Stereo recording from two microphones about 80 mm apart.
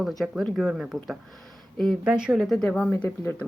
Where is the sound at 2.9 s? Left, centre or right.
Left.